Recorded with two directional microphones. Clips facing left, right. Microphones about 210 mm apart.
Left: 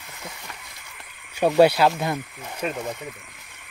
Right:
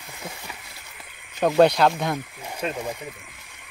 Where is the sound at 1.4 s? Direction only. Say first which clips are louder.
Left 1 dB; 5° left (ahead or behind).